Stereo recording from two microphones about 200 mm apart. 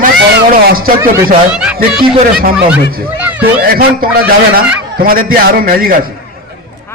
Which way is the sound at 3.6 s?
50° right (ahead or behind).